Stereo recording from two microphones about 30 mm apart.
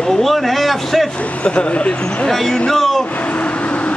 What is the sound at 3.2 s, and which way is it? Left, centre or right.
Vehicle, left.